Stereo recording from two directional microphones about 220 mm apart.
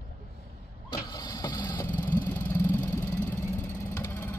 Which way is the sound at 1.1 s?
15° left (ahead or behind).